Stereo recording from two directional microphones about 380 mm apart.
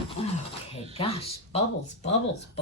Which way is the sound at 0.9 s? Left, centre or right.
Centre.